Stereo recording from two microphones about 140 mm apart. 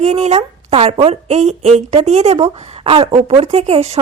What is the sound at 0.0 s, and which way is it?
A woman's voice, 55° right (ahead or behind).